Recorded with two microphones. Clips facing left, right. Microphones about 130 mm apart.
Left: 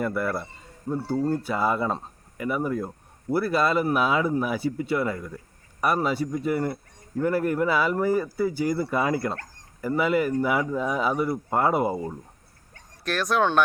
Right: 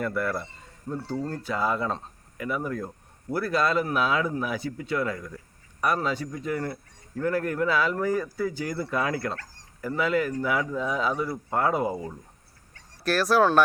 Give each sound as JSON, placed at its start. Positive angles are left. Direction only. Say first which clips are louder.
{"t": 0.0, "sound": "speech", "louder": "left 2 dB", "side_deg": 5}
{"t": 9.3, "sound": "dog", "louder": "left 2 dB", "side_deg": 50}
{"t": 9.8, "sound": "speech", "louder": "left 2 dB", "side_deg": 10}
{"t": 13.1, "sound": "speech", "louder": "right 2 dB", "side_deg": 0}